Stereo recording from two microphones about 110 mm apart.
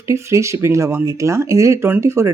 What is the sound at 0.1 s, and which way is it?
Speech, 25° right (ahead or behind).